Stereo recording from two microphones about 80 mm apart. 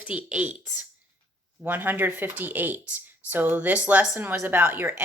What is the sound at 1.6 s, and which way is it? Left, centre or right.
A woman's voice, right.